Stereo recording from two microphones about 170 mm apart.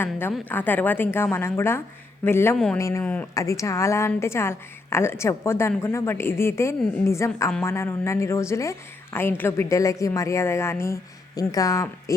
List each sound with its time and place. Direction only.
0.0 s a woman's voice: 10° left (ahead or behind)